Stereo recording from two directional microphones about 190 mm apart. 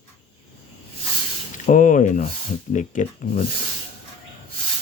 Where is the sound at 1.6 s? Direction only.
45° left (ahead or behind).